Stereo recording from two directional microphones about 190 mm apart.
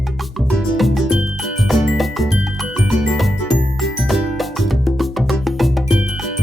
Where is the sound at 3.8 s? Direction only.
Centre (ahead or behind).